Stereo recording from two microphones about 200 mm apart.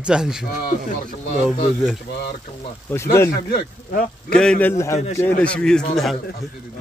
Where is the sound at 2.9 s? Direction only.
10° left (ahead or behind).